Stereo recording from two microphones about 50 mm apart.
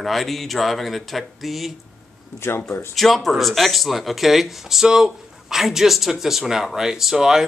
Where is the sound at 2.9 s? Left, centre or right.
Centre.